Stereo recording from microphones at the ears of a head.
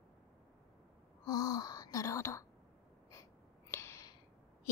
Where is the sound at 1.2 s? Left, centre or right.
Left.